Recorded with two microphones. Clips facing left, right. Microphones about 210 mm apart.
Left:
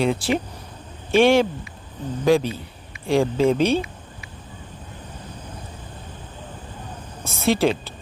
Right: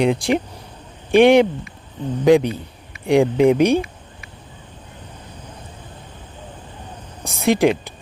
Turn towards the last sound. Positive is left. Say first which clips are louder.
# right 3 dB
turn(degrees=-15)  # may be behind; listen again after turning